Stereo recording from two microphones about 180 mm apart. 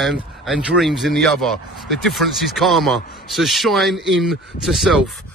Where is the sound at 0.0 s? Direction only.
Centre (ahead or behind).